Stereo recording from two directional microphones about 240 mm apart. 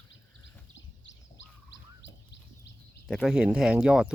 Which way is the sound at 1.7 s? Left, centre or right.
Left.